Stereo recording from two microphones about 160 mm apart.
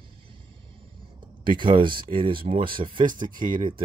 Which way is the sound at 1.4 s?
30° right (ahead or behind).